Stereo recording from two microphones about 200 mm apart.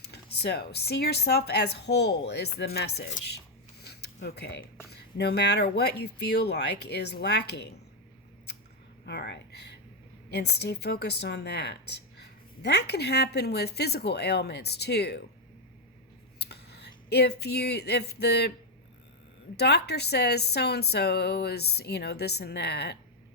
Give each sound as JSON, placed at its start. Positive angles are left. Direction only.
{"t": 0.0, "sound": "a woman's voice", "side_deg": 55}
{"t": 3.8, "sound": "a sound", "side_deg": 55}
{"t": 4.9, "sound": "a woman's voice", "side_deg": 55}
{"t": 9.0, "sound": "a woman's voice", "side_deg": 55}
{"t": 16.4, "sound": "speech", "side_deg": 55}
{"t": 19.5, "sound": "a woman's voice", "side_deg": 55}